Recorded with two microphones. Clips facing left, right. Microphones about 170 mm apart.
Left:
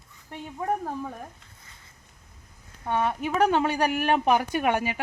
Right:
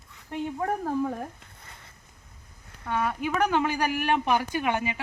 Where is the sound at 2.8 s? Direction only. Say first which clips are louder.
Left 2 dB; 25° left (ahead or behind); by 5.0 s 40° left (ahead or behind).